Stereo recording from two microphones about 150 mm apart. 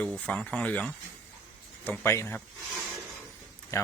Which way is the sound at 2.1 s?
15° left (ahead or behind).